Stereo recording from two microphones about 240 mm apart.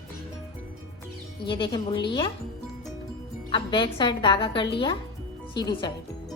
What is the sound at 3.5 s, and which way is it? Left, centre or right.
A woman's voice, left.